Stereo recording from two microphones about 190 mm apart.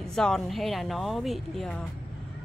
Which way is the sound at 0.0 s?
5° left (ahead or behind).